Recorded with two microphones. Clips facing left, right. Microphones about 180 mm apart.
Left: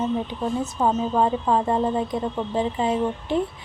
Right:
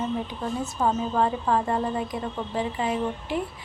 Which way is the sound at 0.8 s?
15° left (ahead or behind).